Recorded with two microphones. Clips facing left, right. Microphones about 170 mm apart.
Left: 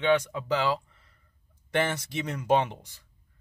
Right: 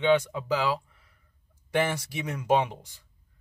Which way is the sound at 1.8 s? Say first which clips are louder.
Even; 10° right (ahead or behind).